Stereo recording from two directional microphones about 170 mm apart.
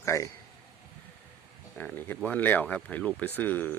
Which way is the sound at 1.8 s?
10° left (ahead or behind).